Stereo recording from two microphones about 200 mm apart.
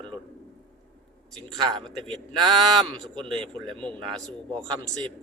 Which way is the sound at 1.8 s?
5° left (ahead or behind).